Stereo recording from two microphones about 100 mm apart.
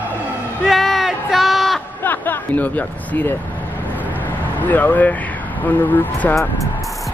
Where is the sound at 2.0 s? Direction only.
20° left (ahead or behind).